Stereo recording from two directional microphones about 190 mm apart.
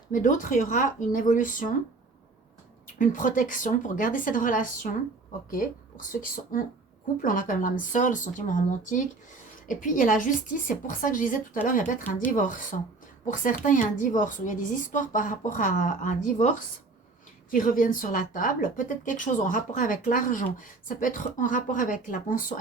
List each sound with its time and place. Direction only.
0.1 s speech: 40° left (ahead or behind)
2.8 s speech: 45° left (ahead or behind)
17.5 s speech: 45° left (ahead or behind)